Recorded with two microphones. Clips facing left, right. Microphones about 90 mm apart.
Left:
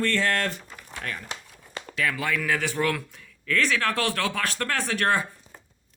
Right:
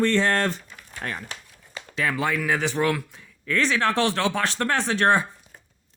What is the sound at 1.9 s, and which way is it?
A man's voice, 30° right (ahead or behind).